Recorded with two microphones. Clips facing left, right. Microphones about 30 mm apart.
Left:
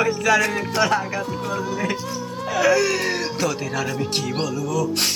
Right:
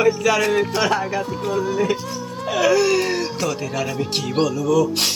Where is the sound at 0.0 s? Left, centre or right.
Right.